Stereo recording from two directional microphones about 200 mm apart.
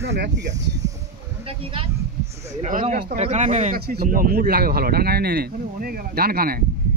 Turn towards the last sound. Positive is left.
turn(degrees=-50)  # may be behind; listen again after turning